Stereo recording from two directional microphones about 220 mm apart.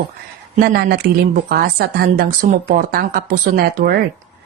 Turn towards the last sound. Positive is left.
turn(degrees=-45)  # may be behind; listen again after turning